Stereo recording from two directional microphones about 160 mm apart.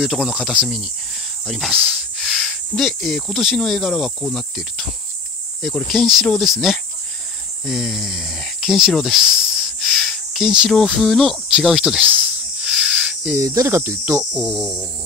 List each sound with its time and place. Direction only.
0.0 s speech: 5° right (ahead or behind)
1.4 s cricket: centre (ahead or behind)
2.7 s speech: centre (ahead or behind)
7.6 s speech: centre (ahead or behind)
9.9 s a sound: centre (ahead or behind)
13.4 s speech: 20° right (ahead or behind)
14.3 s speech: centre (ahead or behind)